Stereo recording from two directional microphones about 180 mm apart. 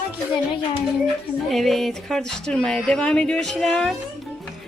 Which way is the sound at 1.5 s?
Centre (ahead or behind).